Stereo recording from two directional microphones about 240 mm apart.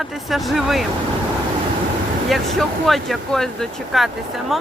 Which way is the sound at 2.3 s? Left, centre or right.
Centre.